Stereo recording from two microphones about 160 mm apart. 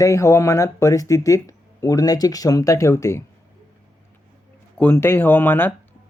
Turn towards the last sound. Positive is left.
turn(degrees=15)  # may be behind; listen again after turning